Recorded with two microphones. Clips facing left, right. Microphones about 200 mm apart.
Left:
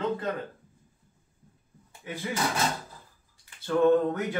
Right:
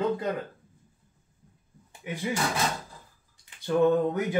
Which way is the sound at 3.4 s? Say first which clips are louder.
Left 1 dB; 15° right (ahead or behind).